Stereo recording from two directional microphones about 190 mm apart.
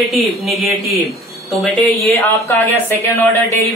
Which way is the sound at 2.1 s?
15° left (ahead or behind).